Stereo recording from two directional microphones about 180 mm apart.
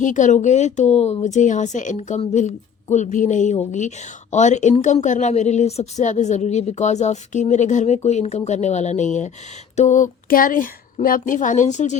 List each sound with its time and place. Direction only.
0.0 s a woman's voice: 45° left (ahead or behind)